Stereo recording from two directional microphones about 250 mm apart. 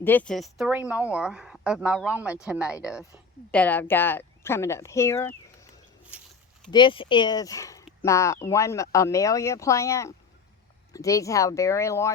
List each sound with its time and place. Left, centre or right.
0.0 s a woman's voice: centre
3.0 s speech: centre
6.1 s a sound: centre
6.7 s speech: centre